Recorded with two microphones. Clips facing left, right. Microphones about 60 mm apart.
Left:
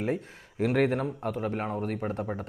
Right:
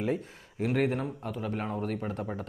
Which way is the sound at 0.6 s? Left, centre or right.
Left.